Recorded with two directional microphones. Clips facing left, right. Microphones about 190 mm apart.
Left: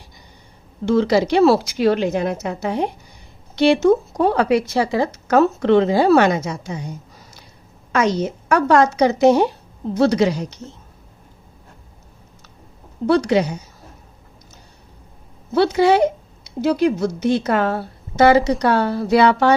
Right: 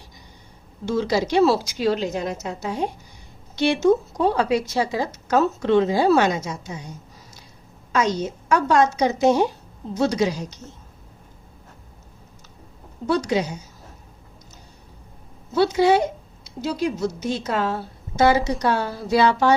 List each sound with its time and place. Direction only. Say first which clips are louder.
0.9 s speech: left 6 dB; 60° left (ahead or behind)
7.9 s speech: left 3 dB; 65° left (ahead or behind)
13.1 s speech: left 5 dB; 65° left (ahead or behind)
15.5 s speech: left 3 dB; 65° left (ahead or behind)